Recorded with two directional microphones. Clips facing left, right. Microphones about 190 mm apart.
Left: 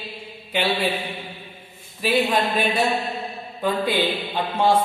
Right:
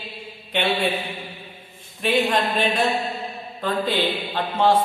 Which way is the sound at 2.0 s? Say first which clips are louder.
Even; 5° left (ahead or behind).